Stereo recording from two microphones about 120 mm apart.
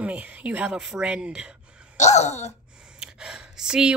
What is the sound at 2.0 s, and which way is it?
Throat clearing, 70° left (ahead or behind).